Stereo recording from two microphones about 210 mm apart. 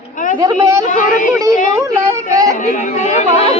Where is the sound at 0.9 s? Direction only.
40° left (ahead or behind).